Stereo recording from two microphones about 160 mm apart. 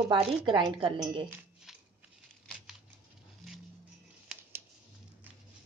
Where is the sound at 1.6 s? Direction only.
5° right (ahead or behind).